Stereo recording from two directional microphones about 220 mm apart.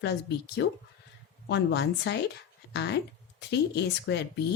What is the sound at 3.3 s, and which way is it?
Speech, 50° left (ahead or behind).